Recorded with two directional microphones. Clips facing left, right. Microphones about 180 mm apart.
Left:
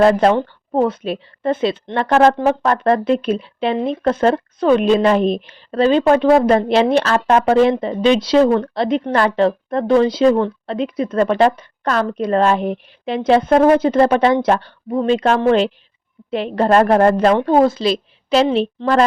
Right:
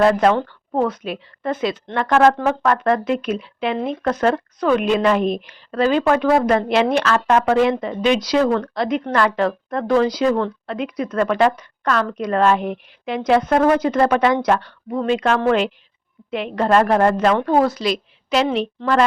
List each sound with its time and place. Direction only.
0.0 s a woman's voice: 30° left (ahead or behind)
17.4 s a woman's voice: 25° left (ahead or behind)